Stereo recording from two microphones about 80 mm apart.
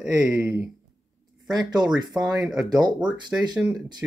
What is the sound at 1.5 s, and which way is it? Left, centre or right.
Speech, right.